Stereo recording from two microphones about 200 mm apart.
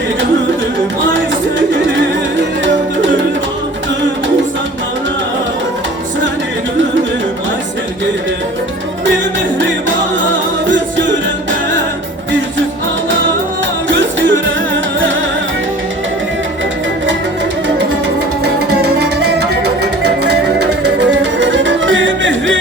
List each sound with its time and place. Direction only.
1.1 s music: 65° right (ahead or behind)
9.0 s music: 65° right (ahead or behind)
13.8 s music: 70° right (ahead or behind)
18.4 s music: 55° right (ahead or behind)